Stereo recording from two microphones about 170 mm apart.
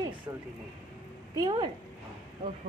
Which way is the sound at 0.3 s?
20° right (ahead or behind).